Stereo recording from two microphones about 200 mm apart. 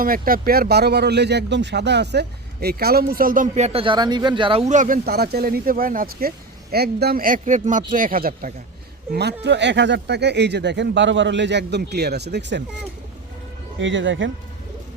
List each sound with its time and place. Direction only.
0.0 s speech: 45° right (ahead or behind)
9.1 s speech: 55° right (ahead or behind)
13.7 s speech: 70° right (ahead or behind)